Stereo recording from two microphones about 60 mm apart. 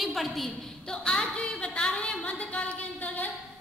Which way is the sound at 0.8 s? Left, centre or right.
Centre.